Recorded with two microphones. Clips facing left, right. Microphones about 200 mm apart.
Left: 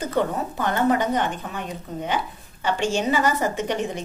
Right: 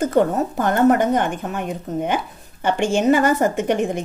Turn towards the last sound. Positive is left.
turn(degrees=-50)  # may be behind; listen again after turning